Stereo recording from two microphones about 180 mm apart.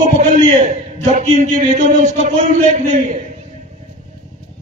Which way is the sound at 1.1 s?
40° right (ahead or behind).